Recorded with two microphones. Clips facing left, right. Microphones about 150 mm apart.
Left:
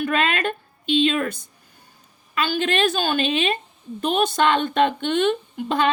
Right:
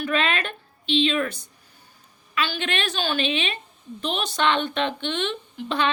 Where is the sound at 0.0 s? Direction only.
45° left (ahead or behind).